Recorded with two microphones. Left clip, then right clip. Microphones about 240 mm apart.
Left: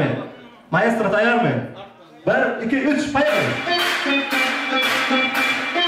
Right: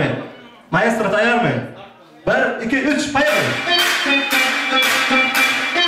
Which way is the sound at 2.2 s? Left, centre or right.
Centre.